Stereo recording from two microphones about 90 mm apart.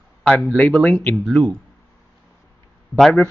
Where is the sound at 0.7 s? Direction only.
15° left (ahead or behind).